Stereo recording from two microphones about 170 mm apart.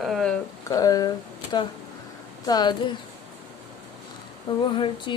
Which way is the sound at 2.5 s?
25° left (ahead or behind).